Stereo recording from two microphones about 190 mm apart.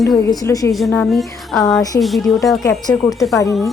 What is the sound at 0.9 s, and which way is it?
A woman's voice, 5° left (ahead or behind).